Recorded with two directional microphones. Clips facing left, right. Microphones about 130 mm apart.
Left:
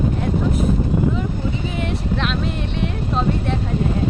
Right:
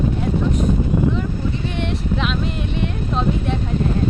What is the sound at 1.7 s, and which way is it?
Speech, centre (ahead or behind).